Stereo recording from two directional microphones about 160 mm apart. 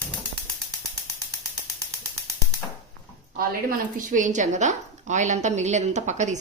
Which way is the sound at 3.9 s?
55° right (ahead or behind).